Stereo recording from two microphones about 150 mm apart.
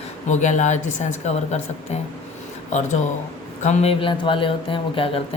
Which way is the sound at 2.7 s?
50° left (ahead or behind).